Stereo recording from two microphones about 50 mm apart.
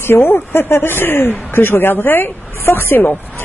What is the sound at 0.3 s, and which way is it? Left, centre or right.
Speech, left.